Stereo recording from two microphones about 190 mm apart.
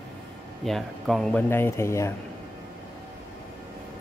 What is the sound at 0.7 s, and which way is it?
Speech, centre (ahead or behind).